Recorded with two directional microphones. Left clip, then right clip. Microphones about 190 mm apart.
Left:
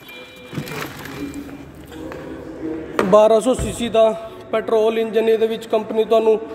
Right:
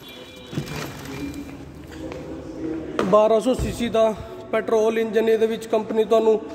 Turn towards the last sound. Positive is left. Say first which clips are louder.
# left 3 dB
turn(degrees=5)  # may be behind; listen again after turning